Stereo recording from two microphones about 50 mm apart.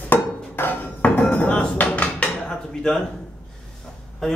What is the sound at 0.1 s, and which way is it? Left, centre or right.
Hammer, left.